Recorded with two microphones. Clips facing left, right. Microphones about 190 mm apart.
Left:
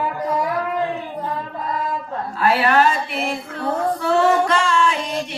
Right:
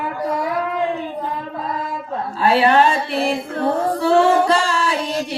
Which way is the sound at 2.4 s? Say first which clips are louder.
Right 2 dB; 30° right (ahead or behind).